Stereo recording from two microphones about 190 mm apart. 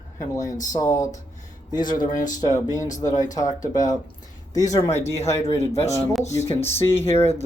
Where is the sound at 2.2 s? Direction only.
45° left (ahead or behind).